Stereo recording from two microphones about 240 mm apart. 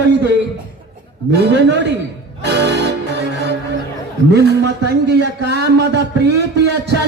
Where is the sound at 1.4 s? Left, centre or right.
Right.